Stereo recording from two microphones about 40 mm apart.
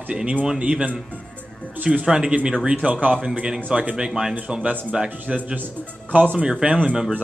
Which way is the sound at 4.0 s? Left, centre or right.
Centre.